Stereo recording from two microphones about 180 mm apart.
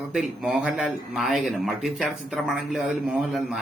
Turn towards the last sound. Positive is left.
turn(degrees=0)  # may be behind; listen again after turning